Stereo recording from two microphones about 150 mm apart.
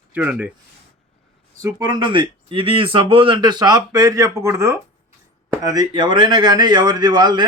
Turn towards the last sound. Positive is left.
turn(degrees=-30)  # may be behind; listen again after turning